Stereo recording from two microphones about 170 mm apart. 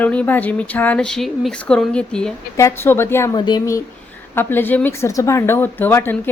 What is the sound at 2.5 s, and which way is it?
Speech, 15° left (ahead or behind).